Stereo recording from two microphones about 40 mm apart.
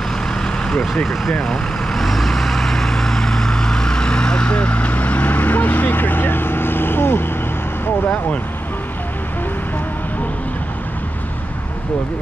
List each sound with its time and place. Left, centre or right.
0.4 s vehicle: centre
2.0 s vehicle: centre; by 7.2 s left